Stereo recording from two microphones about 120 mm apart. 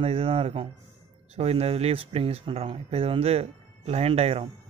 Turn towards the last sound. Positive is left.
turn(degrees=-60)  # may be behind; listen again after turning